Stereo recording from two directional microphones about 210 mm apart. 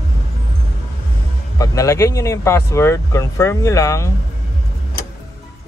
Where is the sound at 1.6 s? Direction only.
15° left (ahead or behind).